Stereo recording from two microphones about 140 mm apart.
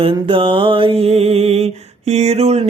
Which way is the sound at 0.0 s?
40° right (ahead or behind).